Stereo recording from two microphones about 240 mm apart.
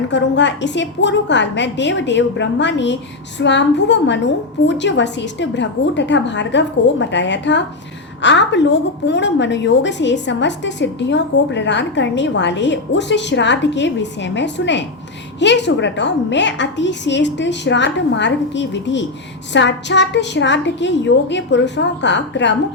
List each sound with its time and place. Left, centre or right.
0.1 s a woman's voice: left